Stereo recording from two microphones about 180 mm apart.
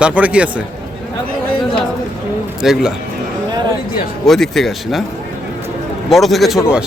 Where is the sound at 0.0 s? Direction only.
5° right (ahead or behind).